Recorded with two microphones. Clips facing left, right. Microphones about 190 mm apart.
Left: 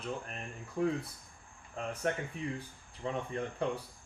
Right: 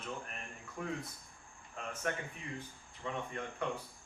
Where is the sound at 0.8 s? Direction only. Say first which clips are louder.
Left 9 dB; 30° left (ahead or behind).